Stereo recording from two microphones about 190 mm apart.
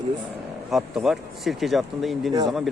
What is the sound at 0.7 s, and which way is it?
Speech, centre (ahead or behind).